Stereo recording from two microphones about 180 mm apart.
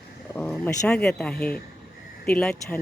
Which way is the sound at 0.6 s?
10° left (ahead or behind).